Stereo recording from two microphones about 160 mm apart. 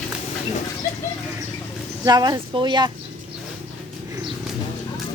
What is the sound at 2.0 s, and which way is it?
Speech, 25° right (ahead or behind).